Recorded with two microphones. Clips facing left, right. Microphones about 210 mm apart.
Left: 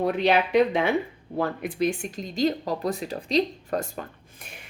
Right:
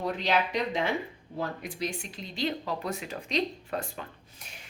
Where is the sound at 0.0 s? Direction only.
60° left (ahead or behind); by 4.4 s 45° left (ahead or behind).